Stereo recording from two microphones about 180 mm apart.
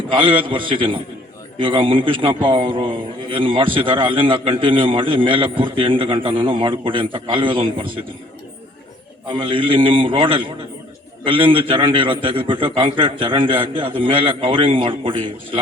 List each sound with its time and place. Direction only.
0.1 s a man's voice: 30° right (ahead or behind)
9.3 s a man's voice: 30° right (ahead or behind)